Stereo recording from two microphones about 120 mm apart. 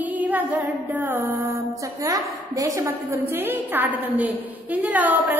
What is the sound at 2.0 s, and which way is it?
A woman's voice, 30° right (ahead or behind).